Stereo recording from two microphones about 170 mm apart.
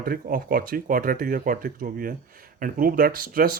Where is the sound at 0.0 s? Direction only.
60° right (ahead or behind).